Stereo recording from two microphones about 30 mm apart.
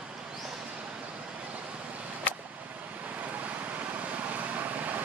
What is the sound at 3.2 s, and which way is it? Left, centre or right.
Vehicle, right.